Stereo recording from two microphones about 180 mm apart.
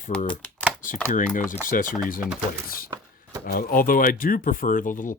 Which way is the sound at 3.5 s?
50° left (ahead or behind).